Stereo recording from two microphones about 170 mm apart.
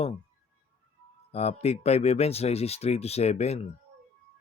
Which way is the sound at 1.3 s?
40° left (ahead or behind).